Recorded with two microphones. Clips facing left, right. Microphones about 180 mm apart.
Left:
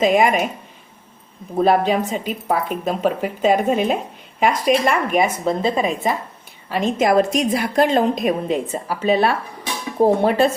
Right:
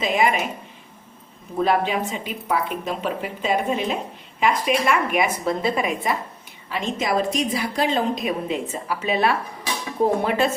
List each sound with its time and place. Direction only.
0.0 s a woman's voice: 50° left (ahead or behind)
1.5 s a woman's voice: 40° left (ahead or behind)
6.7 s a woman's voice: 50° left (ahead or behind)